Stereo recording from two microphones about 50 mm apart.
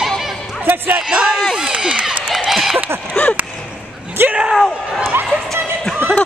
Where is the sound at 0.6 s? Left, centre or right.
Right.